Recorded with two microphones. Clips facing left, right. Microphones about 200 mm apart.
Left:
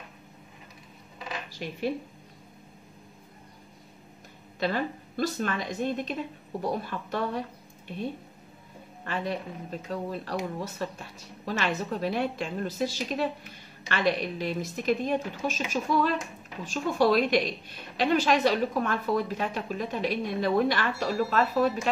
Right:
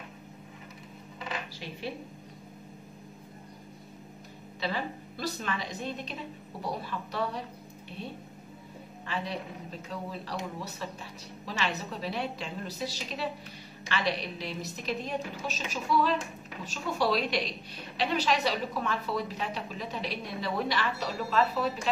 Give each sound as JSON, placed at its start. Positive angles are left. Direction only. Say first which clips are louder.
{"t": 4.6, "sound": "a woman's voice", "louder": "left 5 dB", "side_deg": 50}
{"t": 9.0, "sound": "a woman's voice", "louder": "left 4 dB", "side_deg": 50}